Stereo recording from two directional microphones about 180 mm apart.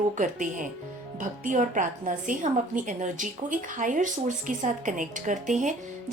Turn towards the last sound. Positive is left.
turn(degrees=-45)  # may be behind; listen again after turning